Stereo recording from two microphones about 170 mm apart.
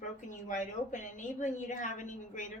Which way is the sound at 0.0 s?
45° left (ahead or behind).